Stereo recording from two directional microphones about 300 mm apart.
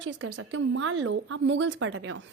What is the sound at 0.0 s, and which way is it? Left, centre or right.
A woman's voice, right.